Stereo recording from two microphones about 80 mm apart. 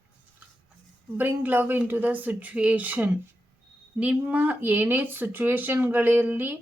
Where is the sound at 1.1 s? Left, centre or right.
Right.